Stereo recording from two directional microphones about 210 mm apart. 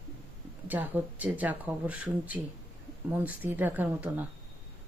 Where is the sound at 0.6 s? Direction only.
10° right (ahead or behind).